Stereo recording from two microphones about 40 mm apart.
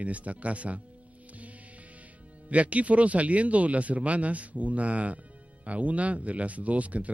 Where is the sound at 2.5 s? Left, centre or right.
Right.